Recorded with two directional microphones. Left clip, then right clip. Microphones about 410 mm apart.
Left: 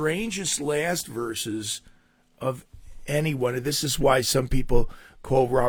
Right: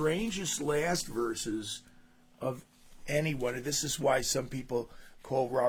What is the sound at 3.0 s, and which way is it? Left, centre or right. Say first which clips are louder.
Speech: left 6 dB; left.